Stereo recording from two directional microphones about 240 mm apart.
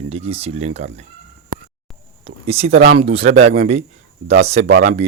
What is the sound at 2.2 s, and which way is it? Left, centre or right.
Speech, right.